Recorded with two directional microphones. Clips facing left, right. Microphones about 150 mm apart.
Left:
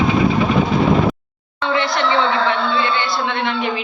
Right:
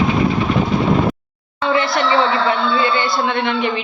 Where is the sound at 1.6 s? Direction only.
5° right (ahead or behind).